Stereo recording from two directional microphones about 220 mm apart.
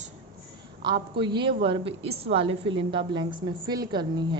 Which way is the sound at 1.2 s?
20° right (ahead or behind).